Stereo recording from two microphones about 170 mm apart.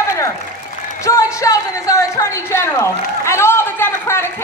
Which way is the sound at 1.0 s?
20° left (ahead or behind).